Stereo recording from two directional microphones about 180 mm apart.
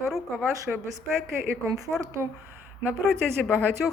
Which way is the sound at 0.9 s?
15° right (ahead or behind).